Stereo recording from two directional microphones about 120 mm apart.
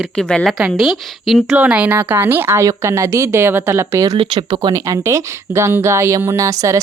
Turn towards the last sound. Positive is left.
turn(degrees=-25)  # may be behind; listen again after turning